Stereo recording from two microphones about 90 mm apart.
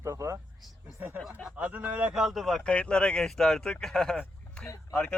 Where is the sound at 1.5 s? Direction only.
15° right (ahead or behind).